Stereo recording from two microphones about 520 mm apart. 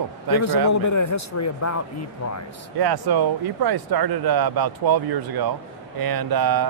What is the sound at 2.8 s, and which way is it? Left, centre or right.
Speech, right.